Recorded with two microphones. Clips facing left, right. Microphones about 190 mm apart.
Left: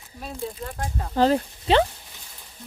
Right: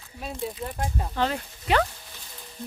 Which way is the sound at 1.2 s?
30° left (ahead or behind).